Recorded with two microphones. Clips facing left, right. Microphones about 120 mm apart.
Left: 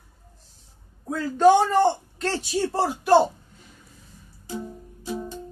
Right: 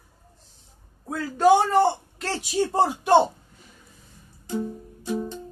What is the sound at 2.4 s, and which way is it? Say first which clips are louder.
Speech: right 4 dB; 20° right (ahead or behind).